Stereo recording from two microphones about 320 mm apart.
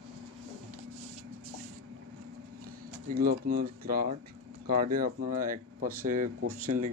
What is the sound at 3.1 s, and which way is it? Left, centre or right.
Speech, right.